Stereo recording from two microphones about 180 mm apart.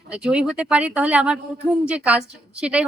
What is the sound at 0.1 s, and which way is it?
A woman's voice, 5° right (ahead or behind).